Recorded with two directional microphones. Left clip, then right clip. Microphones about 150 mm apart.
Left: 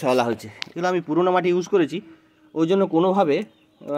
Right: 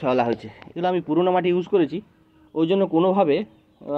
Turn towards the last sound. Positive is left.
turn(degrees=15)  # may be behind; listen again after turning